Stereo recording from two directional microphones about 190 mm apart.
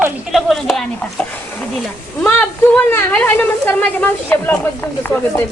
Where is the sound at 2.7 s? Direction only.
10° left (ahead or behind).